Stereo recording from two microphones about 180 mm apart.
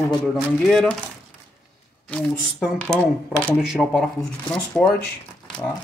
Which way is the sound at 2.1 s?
5° left (ahead or behind).